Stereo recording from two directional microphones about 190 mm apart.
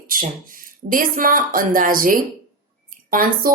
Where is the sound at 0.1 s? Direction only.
45° right (ahead or behind).